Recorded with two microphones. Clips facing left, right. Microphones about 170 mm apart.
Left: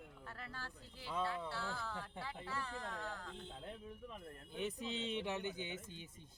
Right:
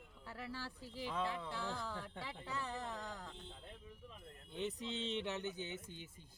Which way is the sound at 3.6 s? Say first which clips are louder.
Left 6 dB; 60° left (ahead or behind).